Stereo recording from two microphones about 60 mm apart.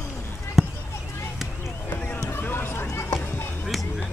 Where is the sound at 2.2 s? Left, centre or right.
Left.